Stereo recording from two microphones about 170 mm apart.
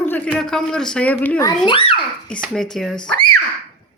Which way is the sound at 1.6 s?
30° left (ahead or behind).